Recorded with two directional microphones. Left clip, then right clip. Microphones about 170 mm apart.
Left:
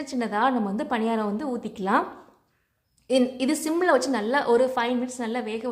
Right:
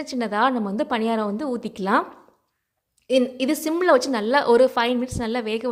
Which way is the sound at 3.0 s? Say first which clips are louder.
Right 2 dB; 25° right (ahead or behind).